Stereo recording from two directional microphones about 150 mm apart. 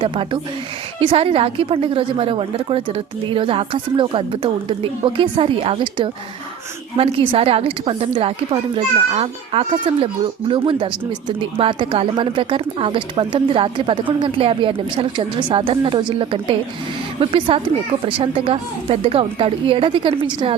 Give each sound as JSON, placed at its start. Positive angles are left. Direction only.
{"t": 1.1, "sound": "speech", "side_deg": -40}